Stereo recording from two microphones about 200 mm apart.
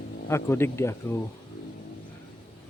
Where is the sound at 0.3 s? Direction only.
15° left (ahead or behind).